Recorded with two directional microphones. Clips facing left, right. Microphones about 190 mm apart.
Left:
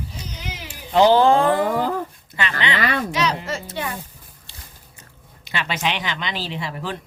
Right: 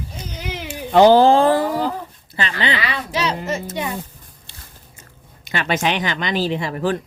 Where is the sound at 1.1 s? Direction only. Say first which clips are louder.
Right 3 dB; 35° right (ahead or behind).